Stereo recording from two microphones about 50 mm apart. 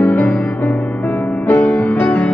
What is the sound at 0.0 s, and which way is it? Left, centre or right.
Music, left.